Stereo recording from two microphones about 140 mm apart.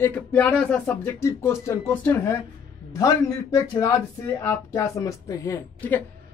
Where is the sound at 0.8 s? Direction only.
20° left (ahead or behind).